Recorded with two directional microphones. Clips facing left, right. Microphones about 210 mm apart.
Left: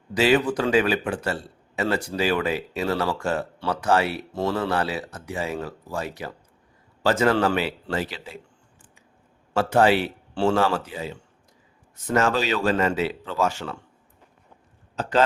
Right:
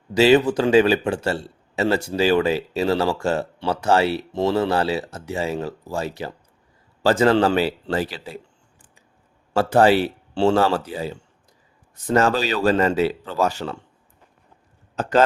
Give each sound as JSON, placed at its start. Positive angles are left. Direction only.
{"t": 0.1, "sound": "a man's voice", "side_deg": -25}
{"t": 4.3, "sound": "a man's voice", "side_deg": -20}
{"t": 9.6, "sound": "speech", "side_deg": -35}
{"t": 15.0, "sound": "speech", "side_deg": -50}